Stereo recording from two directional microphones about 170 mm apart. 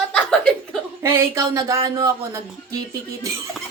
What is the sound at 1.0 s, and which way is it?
Speech, 15° right (ahead or behind).